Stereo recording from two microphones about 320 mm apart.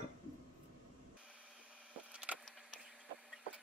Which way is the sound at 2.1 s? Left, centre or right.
Centre.